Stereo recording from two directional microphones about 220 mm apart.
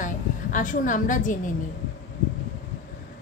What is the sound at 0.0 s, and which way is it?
A woman's voice, 35° left (ahead or behind).